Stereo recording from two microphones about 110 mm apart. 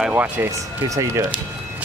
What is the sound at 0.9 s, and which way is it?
Speech, 30° right (ahead or behind).